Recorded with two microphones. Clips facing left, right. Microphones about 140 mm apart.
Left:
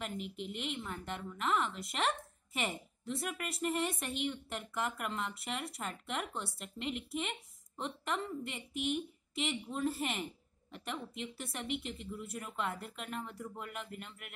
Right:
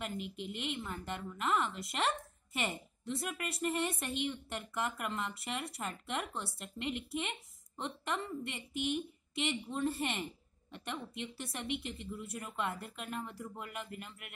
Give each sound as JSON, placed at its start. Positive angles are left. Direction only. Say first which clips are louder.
{"t": 0.0, "sound": "a woman's voice", "louder": "even", "side_deg": 0}